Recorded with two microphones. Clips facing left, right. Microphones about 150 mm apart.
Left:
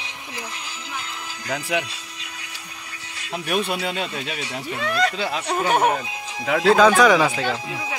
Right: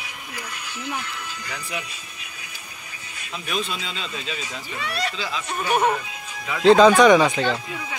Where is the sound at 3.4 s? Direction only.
65° left (ahead or behind).